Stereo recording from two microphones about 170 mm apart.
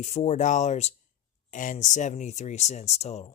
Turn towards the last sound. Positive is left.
turn(degrees=40)  # may be behind; listen again after turning